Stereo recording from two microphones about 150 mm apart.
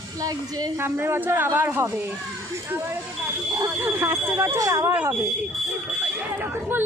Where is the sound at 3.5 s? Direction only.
20° right (ahead or behind).